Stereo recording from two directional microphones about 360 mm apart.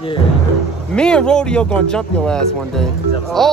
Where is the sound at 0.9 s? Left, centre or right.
Centre.